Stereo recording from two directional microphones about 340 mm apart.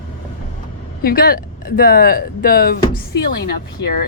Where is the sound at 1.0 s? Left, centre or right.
Left.